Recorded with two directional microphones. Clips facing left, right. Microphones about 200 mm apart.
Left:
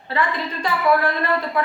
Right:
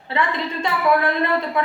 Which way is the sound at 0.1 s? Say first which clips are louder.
Right 1 dB; 25° right (ahead or behind).